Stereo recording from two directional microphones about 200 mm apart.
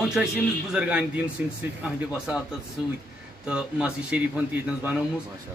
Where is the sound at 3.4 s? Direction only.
5° right (ahead or behind).